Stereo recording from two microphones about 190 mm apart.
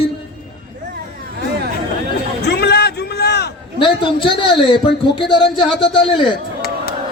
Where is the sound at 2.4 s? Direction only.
60° left (ahead or behind).